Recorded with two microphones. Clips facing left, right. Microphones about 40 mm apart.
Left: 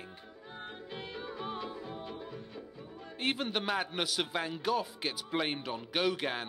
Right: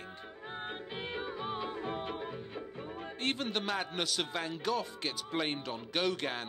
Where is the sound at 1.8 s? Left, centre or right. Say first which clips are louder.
Right 5 dB; right.